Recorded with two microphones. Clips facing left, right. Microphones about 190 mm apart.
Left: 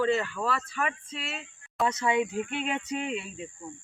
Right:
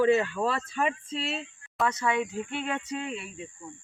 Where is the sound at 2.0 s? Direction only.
20° left (ahead or behind).